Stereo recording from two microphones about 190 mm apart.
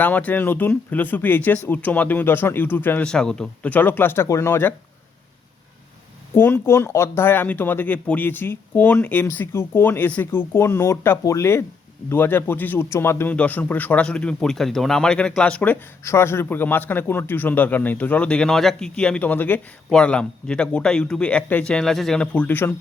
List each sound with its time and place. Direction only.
0.0 s a man's voice: 10° left (ahead or behind)
6.3 s a man's voice: 10° left (ahead or behind)